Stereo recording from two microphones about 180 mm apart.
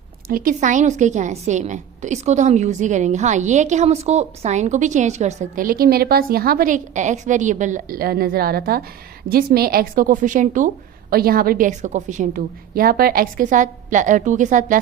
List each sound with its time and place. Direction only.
0.3 s a woman's voice: 50° right (ahead or behind)
11.1 s a woman's voice: 55° right (ahead or behind)